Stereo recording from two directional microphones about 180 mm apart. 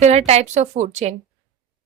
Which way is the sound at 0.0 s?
35° right (ahead or behind).